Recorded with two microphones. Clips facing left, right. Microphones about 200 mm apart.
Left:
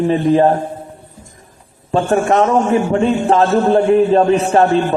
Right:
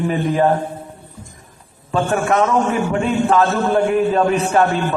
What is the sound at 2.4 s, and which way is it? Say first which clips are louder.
A man's voice: left 4 dB; 30° left (ahead or behind).